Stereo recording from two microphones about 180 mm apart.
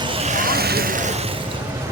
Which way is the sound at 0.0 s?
30° right (ahead or behind).